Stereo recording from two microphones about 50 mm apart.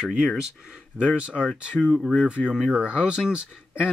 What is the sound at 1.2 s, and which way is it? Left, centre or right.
Speech, centre.